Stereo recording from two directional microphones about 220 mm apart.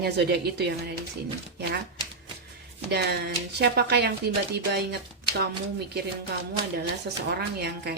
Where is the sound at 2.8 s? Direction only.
50° right (ahead or behind).